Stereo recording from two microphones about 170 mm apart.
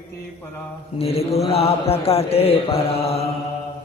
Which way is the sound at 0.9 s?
35° left (ahead or behind).